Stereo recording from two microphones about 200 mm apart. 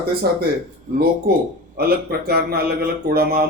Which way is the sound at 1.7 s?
50° right (ahead or behind).